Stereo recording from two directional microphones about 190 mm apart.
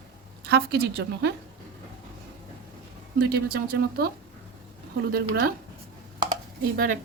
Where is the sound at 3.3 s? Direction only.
55° right (ahead or behind).